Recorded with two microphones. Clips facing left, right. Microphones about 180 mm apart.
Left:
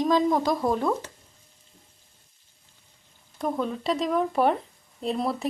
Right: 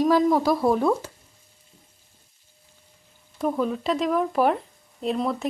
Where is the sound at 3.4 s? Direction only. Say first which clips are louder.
Right 3 dB; 5° right (ahead or behind).